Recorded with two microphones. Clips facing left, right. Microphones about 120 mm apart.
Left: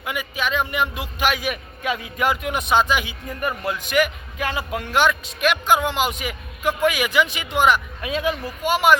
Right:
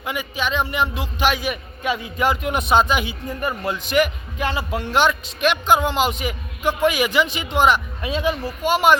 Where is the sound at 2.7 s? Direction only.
40° right (ahead or behind).